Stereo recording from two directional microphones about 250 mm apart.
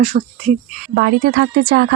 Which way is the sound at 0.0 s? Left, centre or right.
Right.